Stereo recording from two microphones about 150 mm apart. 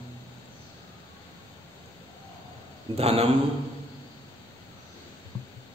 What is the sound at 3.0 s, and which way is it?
Speech, 40° right (ahead or behind).